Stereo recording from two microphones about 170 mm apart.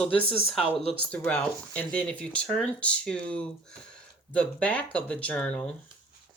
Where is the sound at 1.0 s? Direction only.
5° left (ahead or behind).